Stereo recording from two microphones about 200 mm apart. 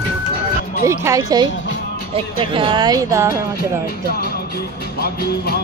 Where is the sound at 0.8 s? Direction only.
15° right (ahead or behind).